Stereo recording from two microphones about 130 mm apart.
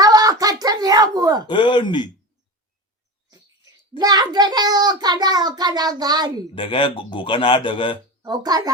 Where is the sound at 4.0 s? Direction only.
30° right (ahead or behind).